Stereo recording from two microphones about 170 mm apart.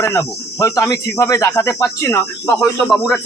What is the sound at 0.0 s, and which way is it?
Cricket, 20° left (ahead or behind).